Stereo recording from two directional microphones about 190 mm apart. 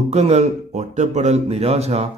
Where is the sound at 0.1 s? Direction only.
35° right (ahead or behind).